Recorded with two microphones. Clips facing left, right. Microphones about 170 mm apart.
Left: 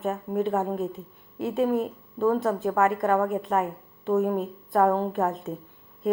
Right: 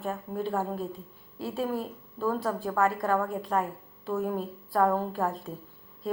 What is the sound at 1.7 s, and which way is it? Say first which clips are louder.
Speech: left 7 dB; 20° left (ahead or behind).